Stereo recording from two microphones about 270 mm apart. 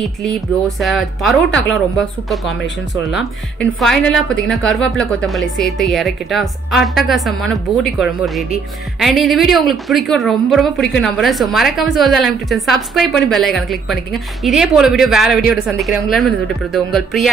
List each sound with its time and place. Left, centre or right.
0.0 s a woman's voice: centre